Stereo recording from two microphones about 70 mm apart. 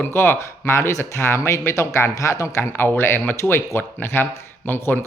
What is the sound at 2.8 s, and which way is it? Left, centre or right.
A man's voice, left.